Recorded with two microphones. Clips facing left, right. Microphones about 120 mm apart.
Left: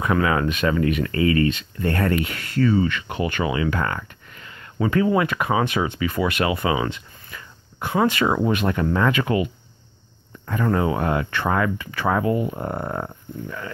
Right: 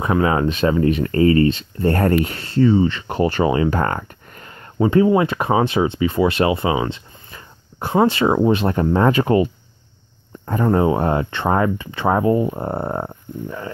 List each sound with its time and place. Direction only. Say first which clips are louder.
0.0 s speech: right 3 dB; 30° right (ahead or behind)
4.8 s speech: right 5 dB; 25° right (ahead or behind)